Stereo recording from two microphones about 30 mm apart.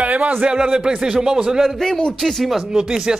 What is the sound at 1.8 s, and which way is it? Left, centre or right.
Speech, centre.